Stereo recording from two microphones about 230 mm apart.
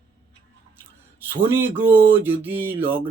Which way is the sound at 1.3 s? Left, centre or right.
Centre.